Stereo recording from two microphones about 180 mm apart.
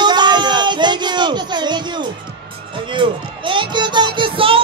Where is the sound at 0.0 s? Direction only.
25° right (ahead or behind).